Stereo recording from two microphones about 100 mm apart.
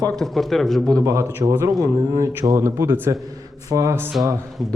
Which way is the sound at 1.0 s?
30° right (ahead or behind).